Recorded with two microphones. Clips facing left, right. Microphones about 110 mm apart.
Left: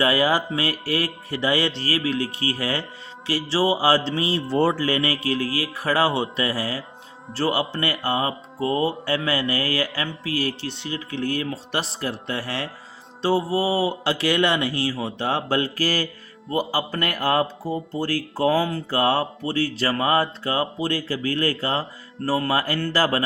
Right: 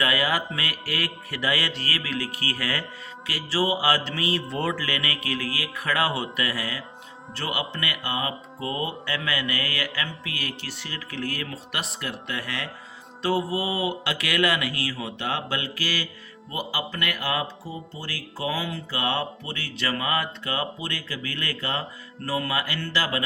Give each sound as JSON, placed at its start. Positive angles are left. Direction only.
{"t": 0.0, "sound": "music", "side_deg": 30}
{"t": 7.3, "sound": "speech", "side_deg": 30}